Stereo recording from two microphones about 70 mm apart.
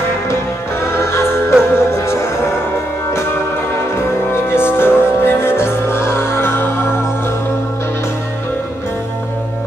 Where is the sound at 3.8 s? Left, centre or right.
Left.